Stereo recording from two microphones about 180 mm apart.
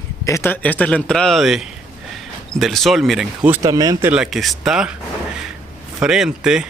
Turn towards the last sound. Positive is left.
turn(degrees=-5)  # may be behind; listen again after turning